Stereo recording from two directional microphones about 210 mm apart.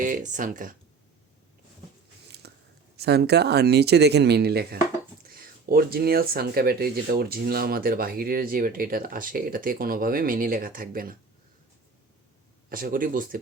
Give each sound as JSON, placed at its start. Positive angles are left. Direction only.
{"t": 0.0, "sound": "speech", "side_deg": -35}
{"t": 2.3, "sound": "biting", "side_deg": -50}
{"t": 2.9, "sound": "speech", "side_deg": -50}
{"t": 12.7, "sound": "speech", "side_deg": -40}